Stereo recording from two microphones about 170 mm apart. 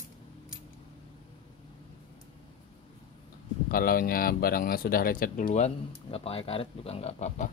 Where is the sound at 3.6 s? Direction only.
60° left (ahead or behind).